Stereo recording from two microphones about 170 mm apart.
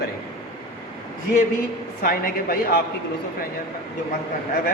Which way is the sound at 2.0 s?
55° left (ahead or behind).